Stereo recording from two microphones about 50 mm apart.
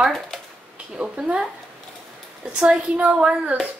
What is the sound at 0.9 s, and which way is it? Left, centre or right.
Speech, centre.